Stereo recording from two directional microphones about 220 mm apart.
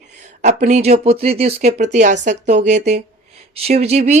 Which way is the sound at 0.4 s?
30° right (ahead or behind).